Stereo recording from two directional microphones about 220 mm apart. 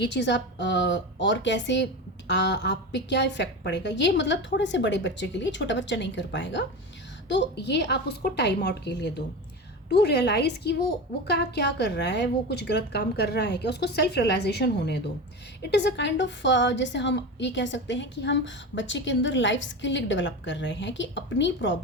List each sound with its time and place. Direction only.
0.0 s a woman's voice: 50° left (ahead or behind)